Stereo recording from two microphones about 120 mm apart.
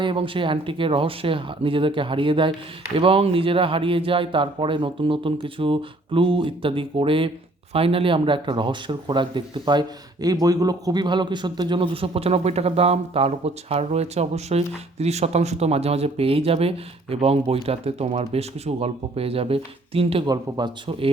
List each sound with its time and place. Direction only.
0.0 s a man's voice: 45° right (ahead or behind)
20.2 s speech: 30° right (ahead or behind)